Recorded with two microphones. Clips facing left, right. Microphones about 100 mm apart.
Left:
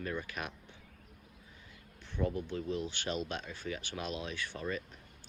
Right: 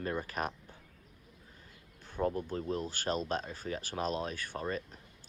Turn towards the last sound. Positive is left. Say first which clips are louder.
# right 1 dB
turn(degrees=-40)  # may be behind; listen again after turning